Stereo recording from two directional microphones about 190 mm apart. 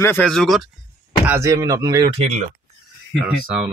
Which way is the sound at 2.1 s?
35° right (ahead or behind).